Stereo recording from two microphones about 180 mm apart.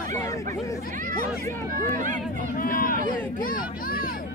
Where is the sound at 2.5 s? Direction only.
50° left (ahead or behind).